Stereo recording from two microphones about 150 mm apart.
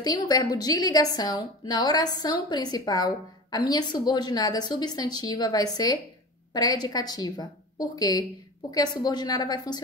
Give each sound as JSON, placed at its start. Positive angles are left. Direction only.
{"t": 0.0, "sound": "a woman's voice", "side_deg": 25}